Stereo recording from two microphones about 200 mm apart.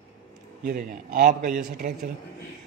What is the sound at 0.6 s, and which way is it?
Speech, 45° right (ahead or behind).